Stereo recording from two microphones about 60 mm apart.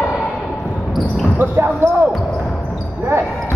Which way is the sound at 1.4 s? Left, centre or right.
Right.